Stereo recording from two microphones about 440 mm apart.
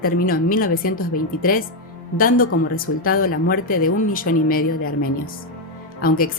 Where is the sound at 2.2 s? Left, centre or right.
Centre.